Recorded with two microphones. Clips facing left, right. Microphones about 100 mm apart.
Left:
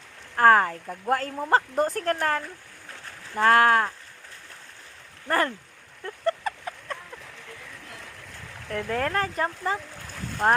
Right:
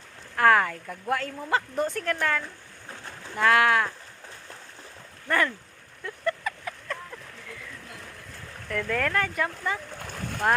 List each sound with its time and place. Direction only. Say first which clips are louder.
0.3 s speech: left 3 dB; 35° left (ahead or behind)
5.3 s speech: left 1 dB; 35° left (ahead or behind)
6.1 s a sound: left 2 dB; 35° left (ahead or behind)
8.7 s speech: even; 30° left (ahead or behind)